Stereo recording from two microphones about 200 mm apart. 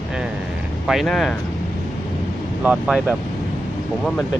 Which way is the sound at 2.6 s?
5° right (ahead or behind).